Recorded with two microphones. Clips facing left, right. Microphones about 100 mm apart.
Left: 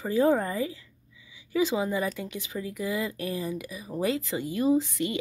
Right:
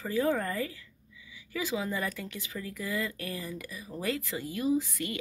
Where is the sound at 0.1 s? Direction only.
25° left (ahead or behind).